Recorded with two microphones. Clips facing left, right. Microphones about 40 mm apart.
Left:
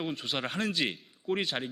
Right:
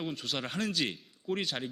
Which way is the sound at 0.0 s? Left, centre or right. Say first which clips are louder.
Left 2 dB; centre.